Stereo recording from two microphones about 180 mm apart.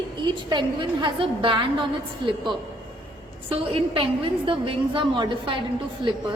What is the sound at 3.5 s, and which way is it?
A woman's voice, 30° right (ahead or behind).